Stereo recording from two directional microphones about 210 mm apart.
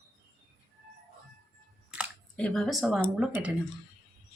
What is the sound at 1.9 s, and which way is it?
Speech, 5° right (ahead or behind).